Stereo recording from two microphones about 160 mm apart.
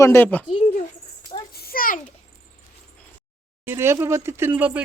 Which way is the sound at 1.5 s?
70° left (ahead or behind).